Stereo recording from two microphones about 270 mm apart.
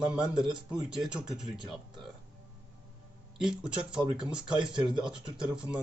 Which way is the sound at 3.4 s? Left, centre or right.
Centre.